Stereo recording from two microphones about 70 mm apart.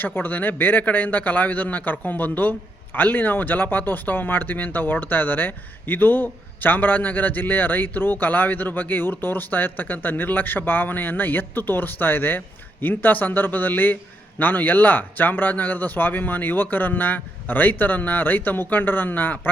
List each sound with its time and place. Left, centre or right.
0.0 s speech: left